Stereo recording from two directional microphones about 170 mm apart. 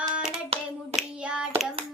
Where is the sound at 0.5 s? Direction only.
35° right (ahead or behind).